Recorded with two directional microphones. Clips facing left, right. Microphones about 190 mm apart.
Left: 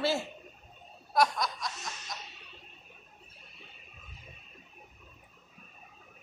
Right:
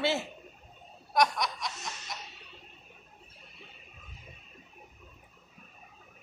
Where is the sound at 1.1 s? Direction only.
5° left (ahead or behind).